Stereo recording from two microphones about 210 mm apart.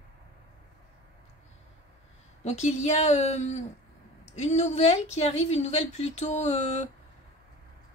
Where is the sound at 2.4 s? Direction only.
30° left (ahead or behind).